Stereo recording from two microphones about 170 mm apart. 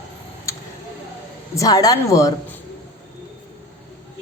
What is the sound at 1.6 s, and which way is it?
Speech, 20° left (ahead or behind).